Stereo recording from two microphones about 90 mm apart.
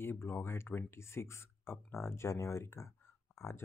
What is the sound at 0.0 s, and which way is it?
Speech, 25° left (ahead or behind).